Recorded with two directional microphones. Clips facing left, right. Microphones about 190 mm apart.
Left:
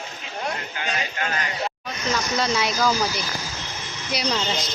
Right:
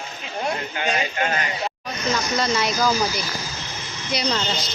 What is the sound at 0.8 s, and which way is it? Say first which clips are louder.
Speech: right 5 dB; 20° right (ahead or behind).